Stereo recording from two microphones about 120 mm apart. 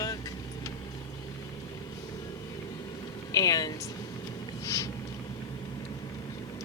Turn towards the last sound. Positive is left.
turn(degrees=25)  # may be behind; listen again after turning